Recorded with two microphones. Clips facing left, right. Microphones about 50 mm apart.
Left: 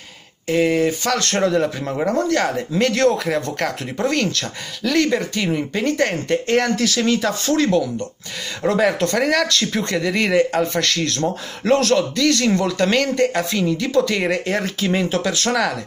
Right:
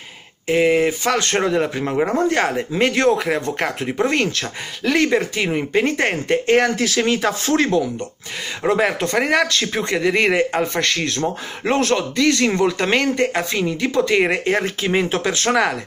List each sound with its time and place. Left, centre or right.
0.5 s speech: centre
8.6 s speech: centre